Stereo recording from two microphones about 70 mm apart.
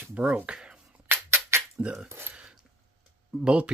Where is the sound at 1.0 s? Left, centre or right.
Right.